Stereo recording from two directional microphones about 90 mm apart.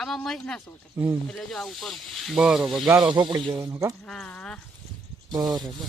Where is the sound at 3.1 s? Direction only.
60° right (ahead or behind).